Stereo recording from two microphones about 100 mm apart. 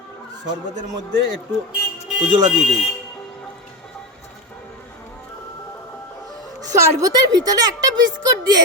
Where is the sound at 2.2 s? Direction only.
5° right (ahead or behind).